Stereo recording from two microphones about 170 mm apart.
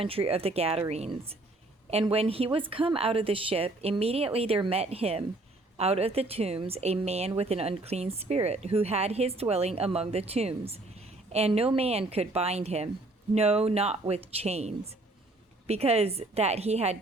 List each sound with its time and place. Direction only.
0.0 s a woman's voice: 35° right (ahead or behind)